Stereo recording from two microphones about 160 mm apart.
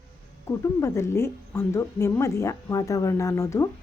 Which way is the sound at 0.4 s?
20° left (ahead or behind).